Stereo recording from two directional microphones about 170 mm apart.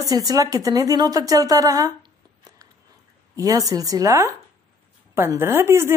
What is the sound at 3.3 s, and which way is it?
A woman's voice, 20° right (ahead or behind).